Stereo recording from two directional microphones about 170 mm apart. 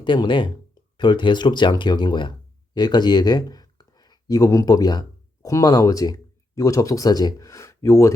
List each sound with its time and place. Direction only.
0.0 s speech: 30° left (ahead or behind)